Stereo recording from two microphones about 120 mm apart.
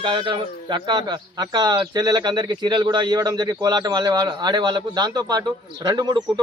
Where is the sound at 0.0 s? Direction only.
40° right (ahead or behind).